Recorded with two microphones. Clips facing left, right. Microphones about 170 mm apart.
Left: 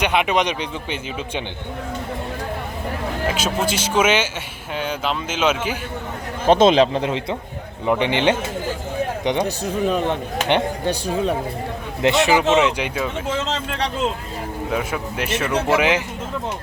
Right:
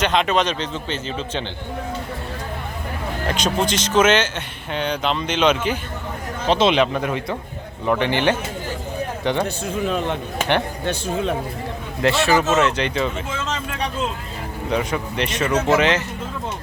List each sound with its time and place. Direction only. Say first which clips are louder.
0.0 s a man's voice: even; 10° left (ahead or behind)
3.2 s a man's voice: right 1 dB; 5° left (ahead or behind)
6.5 s a man's voice: left 4 dB; 45° left (ahead or behind)
6.7 s a man's voice: left 2 dB; 30° left (ahead or behind); by 13.2 s 5° left (ahead or behind)
14.7 s a man's voice: right 3 dB; 5° left (ahead or behind)